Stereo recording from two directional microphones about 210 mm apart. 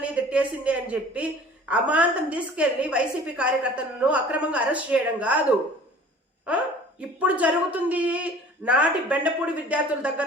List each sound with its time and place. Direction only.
0.0 s a woman's voice: 5° right (ahead or behind)